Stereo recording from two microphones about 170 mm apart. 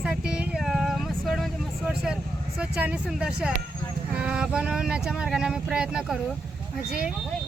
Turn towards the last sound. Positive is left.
turn(degrees=-5)  # may be behind; listen again after turning